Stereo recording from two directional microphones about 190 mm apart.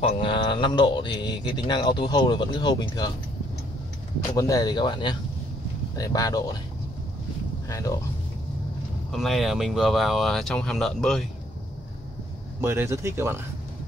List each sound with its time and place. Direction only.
0.0 s speech: 30° left (ahead or behind)
4.4 s speech: 20° left (ahead or behind)
7.6 s speech: 15° left (ahead or behind)
9.1 s speech: centre (ahead or behind)
12.5 s speech: 10° right (ahead or behind)